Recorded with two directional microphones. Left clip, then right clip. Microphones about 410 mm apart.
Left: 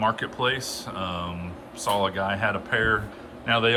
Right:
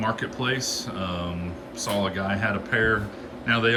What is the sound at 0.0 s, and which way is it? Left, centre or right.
Speech, centre.